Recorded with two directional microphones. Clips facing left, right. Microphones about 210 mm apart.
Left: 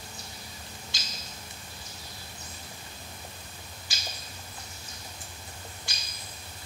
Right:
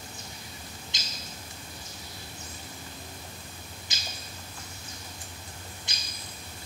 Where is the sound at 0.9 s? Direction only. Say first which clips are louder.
Right 1 dB; 20° right (ahead or behind).